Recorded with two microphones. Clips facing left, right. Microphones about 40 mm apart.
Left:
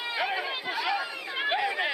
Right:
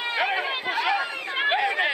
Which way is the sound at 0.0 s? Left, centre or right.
Right.